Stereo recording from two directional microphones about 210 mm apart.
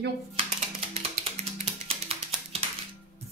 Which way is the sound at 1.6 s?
30° right (ahead or behind).